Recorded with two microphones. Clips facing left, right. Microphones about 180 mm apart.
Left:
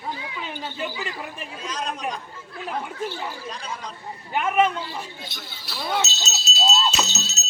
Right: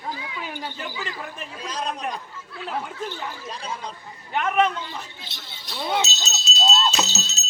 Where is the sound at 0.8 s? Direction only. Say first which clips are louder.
Left 3 dB; 15° left (ahead or behind).